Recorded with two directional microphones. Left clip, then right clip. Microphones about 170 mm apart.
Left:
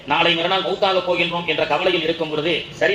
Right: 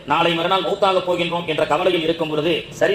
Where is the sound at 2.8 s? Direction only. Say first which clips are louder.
Right 1 dB; 25° right (ahead or behind).